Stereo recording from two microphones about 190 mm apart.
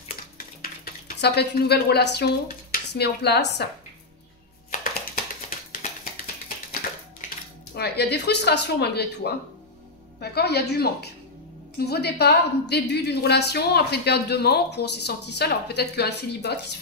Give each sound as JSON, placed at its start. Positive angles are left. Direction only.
{"t": 0.4, "sound": "speech", "side_deg": 50}
{"t": 7.7, "sound": "a woman's voice", "side_deg": 60}